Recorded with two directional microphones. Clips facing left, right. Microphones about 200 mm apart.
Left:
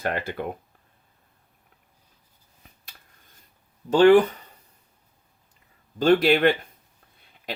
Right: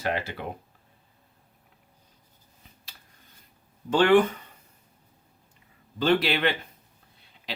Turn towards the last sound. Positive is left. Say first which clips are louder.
# left 6 dB
turn(degrees=50)  # may be behind; listen again after turning